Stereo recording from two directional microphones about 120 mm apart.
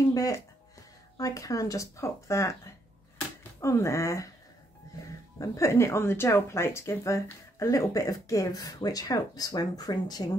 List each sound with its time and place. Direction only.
0.1 s music: 30° left (ahead or behind)
1.1 s speech: 30° left (ahead or behind)
3.6 s speech: 25° left (ahead or behind)
5.4 s speech: 25° left (ahead or behind)